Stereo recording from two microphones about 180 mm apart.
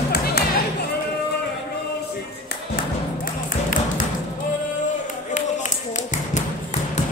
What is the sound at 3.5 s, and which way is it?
Music, 50° left (ahead or behind).